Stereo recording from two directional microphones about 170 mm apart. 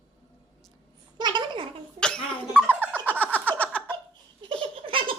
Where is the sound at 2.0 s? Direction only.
5° left (ahead or behind).